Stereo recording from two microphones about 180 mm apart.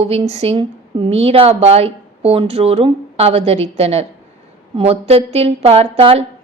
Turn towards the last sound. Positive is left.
turn(degrees=-30)  # may be behind; listen again after turning